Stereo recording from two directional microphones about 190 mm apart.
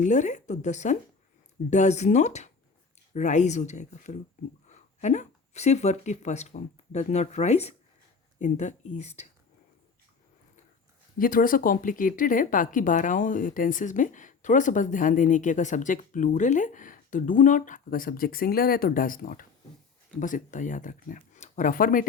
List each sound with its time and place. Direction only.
0.0 s speech: 40° left (ahead or behind)
11.2 s speech: 50° left (ahead or behind)